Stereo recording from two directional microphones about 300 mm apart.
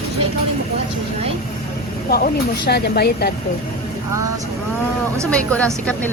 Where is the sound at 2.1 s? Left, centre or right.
Left.